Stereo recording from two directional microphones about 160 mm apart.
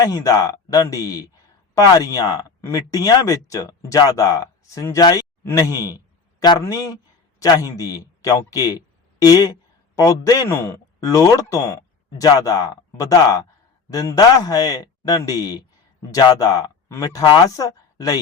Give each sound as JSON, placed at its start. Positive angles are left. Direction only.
{"t": 0.0, "sound": "a man's voice", "side_deg": 20}